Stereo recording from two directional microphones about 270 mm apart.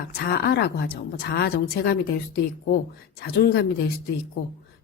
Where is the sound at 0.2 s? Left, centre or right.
Left.